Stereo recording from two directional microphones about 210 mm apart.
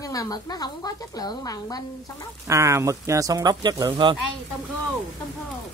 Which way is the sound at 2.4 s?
15° right (ahead or behind).